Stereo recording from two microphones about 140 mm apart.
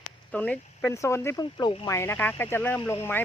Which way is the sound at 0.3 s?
10° left (ahead or behind).